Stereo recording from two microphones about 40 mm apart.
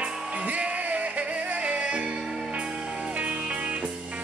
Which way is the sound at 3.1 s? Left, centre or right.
Right.